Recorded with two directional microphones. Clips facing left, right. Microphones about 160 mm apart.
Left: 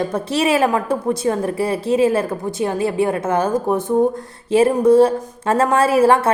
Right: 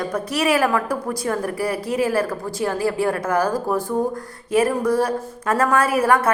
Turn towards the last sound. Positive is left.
turn(degrees=30)  # may be behind; listen again after turning